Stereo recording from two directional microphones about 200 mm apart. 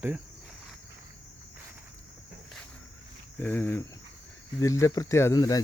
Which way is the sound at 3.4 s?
10° left (ahead or behind).